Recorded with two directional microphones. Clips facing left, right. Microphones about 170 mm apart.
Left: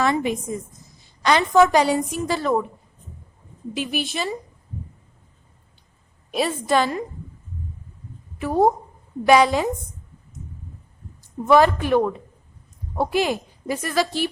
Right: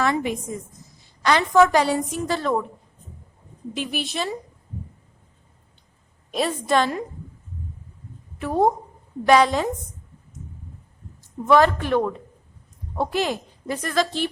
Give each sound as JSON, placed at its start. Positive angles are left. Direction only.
{"t": 0.0, "sound": "a woman's voice", "side_deg": 20}
{"t": 3.8, "sound": "a woman's voice", "side_deg": 0}
{"t": 6.3, "sound": "a woman's voice", "side_deg": 5}
{"t": 8.4, "sound": "a woman's voice", "side_deg": 5}
{"t": 11.4, "sound": "a woman's voice", "side_deg": 10}